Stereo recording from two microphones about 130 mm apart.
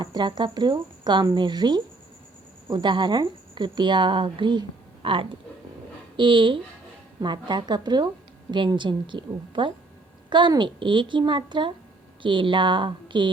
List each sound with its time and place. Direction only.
0.0 s a woman's voice: 35° right (ahead or behind)